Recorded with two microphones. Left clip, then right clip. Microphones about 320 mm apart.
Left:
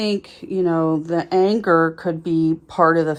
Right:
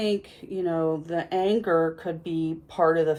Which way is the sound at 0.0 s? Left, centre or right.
Centre.